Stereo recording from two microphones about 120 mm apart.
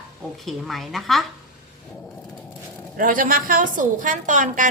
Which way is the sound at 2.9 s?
90° right.